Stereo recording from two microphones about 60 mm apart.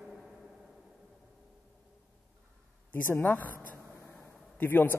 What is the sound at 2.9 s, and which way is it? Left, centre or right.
Speech, left.